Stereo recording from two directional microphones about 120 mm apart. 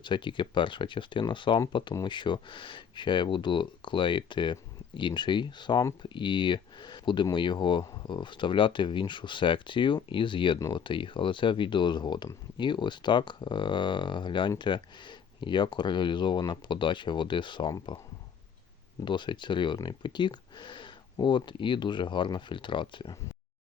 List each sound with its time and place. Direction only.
0.0 s speech: 40° left (ahead or behind)
19.0 s speech: 40° left (ahead or behind)